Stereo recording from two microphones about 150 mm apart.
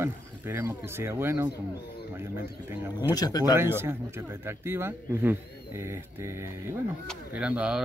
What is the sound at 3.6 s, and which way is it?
Speech, 15° right (ahead or behind).